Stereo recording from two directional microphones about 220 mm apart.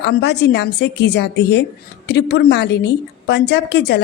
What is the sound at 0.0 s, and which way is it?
A woman's voice, 50° left (ahead or behind).